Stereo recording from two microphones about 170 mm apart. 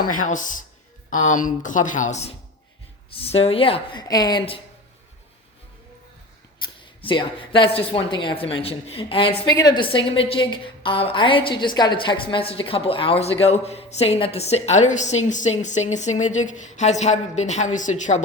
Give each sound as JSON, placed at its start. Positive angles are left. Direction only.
{"t": 0.0, "sound": "a woman's voice", "side_deg": 50}
{"t": 7.0, "sound": "a woman's voice", "side_deg": 30}